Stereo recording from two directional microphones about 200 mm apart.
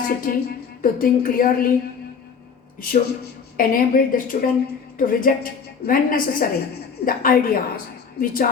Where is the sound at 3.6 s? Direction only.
45° left (ahead or behind).